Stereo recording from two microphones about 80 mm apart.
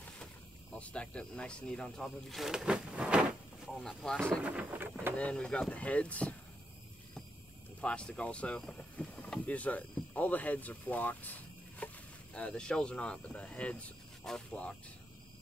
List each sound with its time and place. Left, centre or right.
0.7 s speech: centre
3.7 s speech: centre
4.4 s speech: centre
5.1 s speech: centre
7.8 s speech: centre